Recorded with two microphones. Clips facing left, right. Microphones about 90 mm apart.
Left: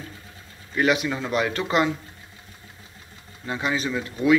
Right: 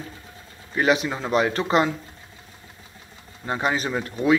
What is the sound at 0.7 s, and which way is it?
Speech, 35° right (ahead or behind).